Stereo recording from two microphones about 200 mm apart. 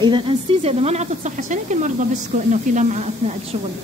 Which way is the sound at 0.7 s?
30° right (ahead or behind).